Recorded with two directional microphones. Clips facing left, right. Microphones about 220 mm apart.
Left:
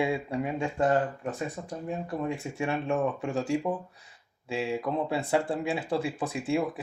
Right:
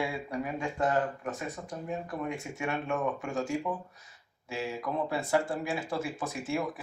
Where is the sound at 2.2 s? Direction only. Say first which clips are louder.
Left 3 dB; 30° left (ahead or behind).